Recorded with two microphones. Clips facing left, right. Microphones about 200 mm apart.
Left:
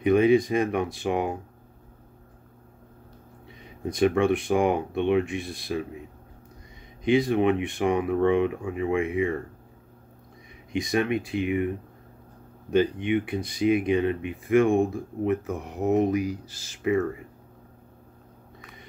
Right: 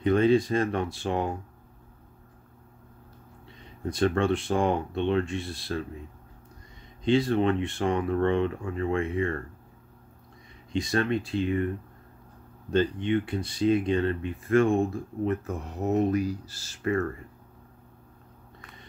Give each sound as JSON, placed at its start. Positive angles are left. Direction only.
{"t": 0.0, "sound": "speech", "side_deg": 15}
{"t": 3.4, "sound": "speech", "side_deg": 15}
{"t": 7.1, "sound": "speech", "side_deg": 15}
{"t": 10.7, "sound": "speech", "side_deg": 15}
{"t": 12.7, "sound": "speech", "side_deg": 15}